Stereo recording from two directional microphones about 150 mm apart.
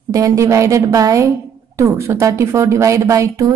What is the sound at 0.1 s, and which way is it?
Speech, 20° right (ahead or behind).